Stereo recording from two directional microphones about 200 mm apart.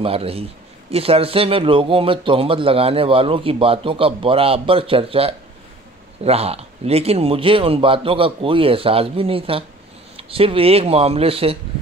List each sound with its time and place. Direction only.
0.0 s speech: 30° right (ahead or behind)